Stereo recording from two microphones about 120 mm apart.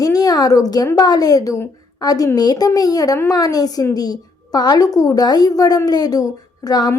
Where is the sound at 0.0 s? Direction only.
30° left (ahead or behind).